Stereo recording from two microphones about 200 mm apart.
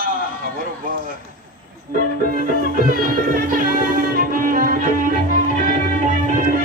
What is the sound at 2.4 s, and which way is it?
Music, 45° right (ahead or behind).